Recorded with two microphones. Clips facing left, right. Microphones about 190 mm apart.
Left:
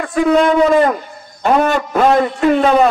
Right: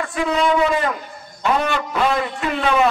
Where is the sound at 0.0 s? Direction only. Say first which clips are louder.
Left 7 dB; 50° left (ahead or behind).